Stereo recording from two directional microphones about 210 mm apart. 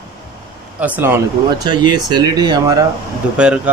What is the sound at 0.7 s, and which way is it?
Speech, 5° right (ahead or behind).